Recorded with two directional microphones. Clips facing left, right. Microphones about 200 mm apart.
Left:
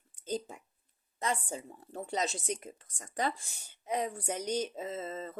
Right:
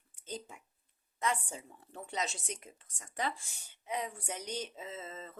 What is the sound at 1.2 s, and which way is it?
Speech, 35° left (ahead or behind).